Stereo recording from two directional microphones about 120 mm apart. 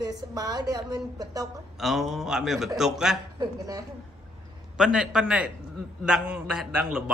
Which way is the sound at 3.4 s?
30° right (ahead or behind).